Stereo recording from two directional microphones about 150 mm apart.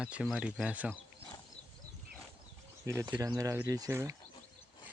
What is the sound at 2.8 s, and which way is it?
Speech, 20° right (ahead or behind).